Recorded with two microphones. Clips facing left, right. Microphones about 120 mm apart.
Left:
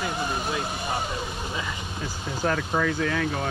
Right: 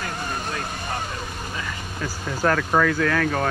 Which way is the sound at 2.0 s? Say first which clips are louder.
Right 5 dB; 90° right.